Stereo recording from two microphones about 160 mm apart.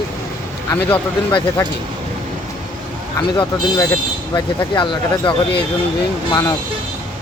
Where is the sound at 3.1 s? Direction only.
25° left (ahead or behind).